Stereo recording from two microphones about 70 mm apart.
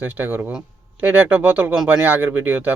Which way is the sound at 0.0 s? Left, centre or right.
Right.